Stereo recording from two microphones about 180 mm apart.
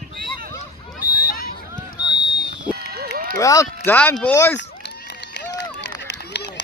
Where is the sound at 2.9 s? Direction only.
60° right (ahead or behind).